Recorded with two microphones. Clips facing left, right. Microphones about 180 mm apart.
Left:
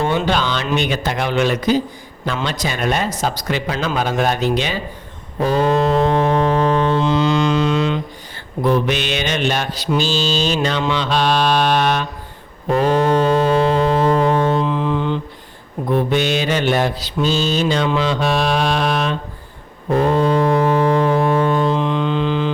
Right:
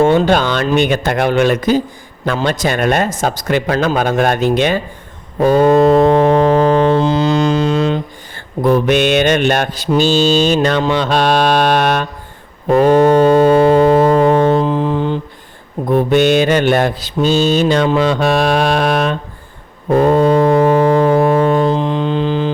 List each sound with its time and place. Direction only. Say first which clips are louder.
0.0 s mantra: right 7 dB; 45° right (ahead or behind)
6.9 s mantra: right 3 dB; 35° right (ahead or behind)
8.6 s mantra: right 6 dB; 50° right (ahead or behind)
12.6 s foghorn: right 6 dB; 50° right (ahead or behind)
15.9 s mantra: right 6 dB; 45° right (ahead or behind)
19.9 s foghorn: right 5 dB; 45° right (ahead or behind)